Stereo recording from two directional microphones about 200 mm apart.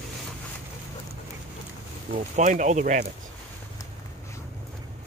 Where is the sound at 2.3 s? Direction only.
40° right (ahead or behind).